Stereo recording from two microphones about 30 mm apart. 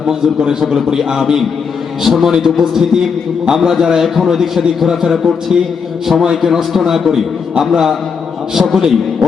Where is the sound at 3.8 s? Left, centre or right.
Centre.